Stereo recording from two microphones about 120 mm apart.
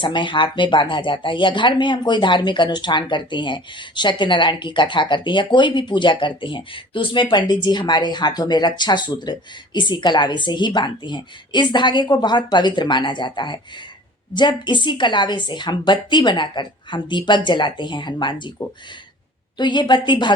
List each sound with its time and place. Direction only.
0.0 s speech: 40° left (ahead or behind)
19.5 s speech: 40° left (ahead or behind)